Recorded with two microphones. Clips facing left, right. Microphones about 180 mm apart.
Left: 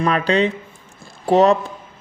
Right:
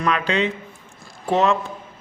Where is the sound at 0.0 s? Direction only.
35° left (ahead or behind).